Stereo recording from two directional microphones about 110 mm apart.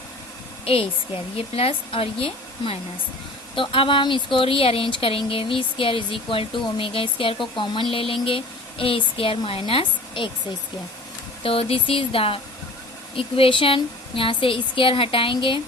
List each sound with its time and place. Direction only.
0.6 s a woman's voice: 60° left (ahead or behind)
11.4 s a woman's voice: 55° left (ahead or behind)